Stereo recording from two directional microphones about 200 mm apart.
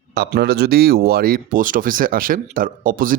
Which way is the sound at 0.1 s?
55° right (ahead or behind).